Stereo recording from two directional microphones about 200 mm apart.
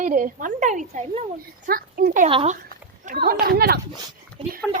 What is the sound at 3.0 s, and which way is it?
Speech, 45° right (ahead or behind).